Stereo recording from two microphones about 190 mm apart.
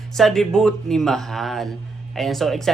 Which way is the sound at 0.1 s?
Centre (ahead or behind).